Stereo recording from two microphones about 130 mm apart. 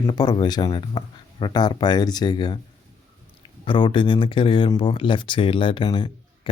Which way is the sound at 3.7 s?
40° left (ahead or behind).